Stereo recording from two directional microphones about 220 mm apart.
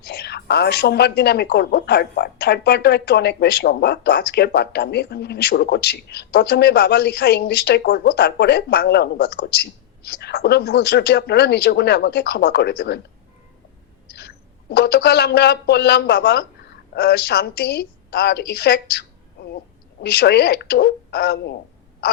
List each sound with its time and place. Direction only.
0.0 s speech: 45° left (ahead or behind)
14.1 s a woman's voice: 45° left (ahead or behind)